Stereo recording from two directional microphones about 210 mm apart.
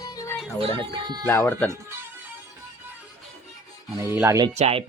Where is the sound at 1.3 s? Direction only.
10° left (ahead or behind).